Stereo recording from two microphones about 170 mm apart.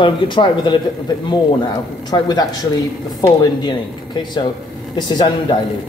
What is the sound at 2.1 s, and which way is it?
Speech, 25° left (ahead or behind).